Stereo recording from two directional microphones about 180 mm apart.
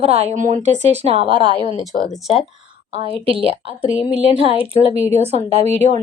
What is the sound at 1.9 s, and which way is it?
Speech, 50° left (ahead or behind).